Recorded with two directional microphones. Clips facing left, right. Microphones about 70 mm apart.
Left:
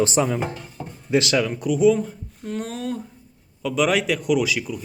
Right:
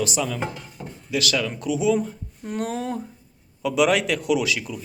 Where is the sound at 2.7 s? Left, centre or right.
Centre.